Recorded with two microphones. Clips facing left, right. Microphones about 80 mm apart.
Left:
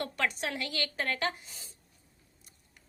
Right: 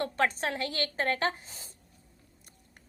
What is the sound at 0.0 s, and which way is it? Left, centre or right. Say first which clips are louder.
A woman's voice: right 4 dB; right.